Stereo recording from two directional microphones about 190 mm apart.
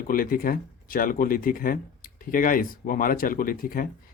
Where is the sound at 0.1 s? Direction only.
50° left (ahead or behind).